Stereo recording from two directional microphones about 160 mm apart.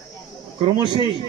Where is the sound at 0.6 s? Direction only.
30° right (ahead or behind).